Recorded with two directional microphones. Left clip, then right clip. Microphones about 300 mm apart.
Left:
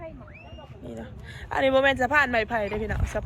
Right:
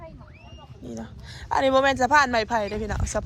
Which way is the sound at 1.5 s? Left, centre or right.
Centre.